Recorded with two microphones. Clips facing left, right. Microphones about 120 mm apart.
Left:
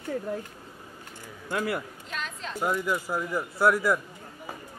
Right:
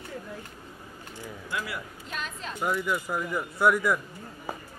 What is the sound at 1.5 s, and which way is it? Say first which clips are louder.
Speech: left 6 dB; 50° left (ahead or behind).